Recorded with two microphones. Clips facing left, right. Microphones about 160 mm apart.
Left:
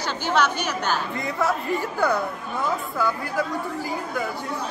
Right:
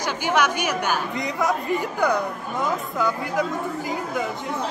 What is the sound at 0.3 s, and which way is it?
Speech, 10° right (ahead or behind).